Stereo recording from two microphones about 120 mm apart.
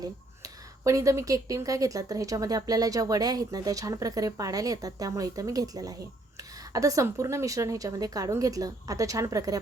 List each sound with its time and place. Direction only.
0.0 s speech: 30° right (ahead or behind)